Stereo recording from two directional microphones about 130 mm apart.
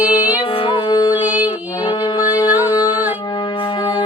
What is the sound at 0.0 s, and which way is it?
Music, 10° right (ahead or behind).